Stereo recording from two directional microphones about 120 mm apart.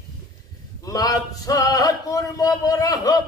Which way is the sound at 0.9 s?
30° left (ahead or behind).